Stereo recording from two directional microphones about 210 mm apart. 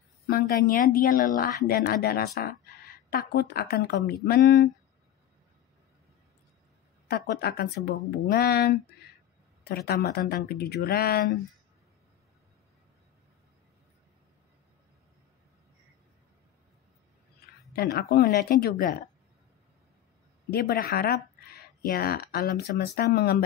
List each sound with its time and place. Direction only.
0.3 s a woman's voice: 45° left (ahead or behind)
7.1 s a woman's voice: 50° left (ahead or behind)
17.7 s a woman's voice: 45° left (ahead or behind)
20.4 s speech: 45° left (ahead or behind)